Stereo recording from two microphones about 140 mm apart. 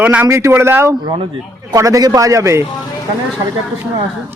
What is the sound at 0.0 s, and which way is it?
A man's voice, 10° right (ahead or behind).